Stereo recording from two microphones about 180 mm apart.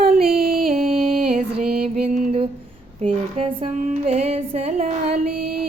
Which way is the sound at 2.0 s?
40° right (ahead or behind).